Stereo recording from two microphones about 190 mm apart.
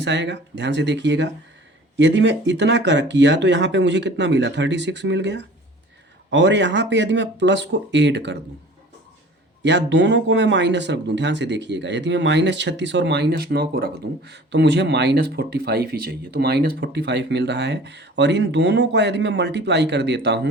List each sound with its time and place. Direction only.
0.0 s speech: 65° right (ahead or behind)
9.6 s speech: 70° right (ahead or behind)